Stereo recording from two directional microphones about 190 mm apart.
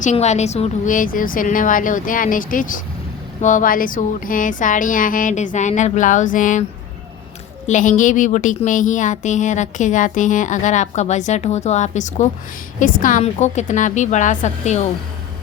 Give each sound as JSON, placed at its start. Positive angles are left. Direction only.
{"t": 0.0, "sound": "music", "side_deg": 40}
{"t": 7.7, "sound": "a woman's voice", "side_deg": 40}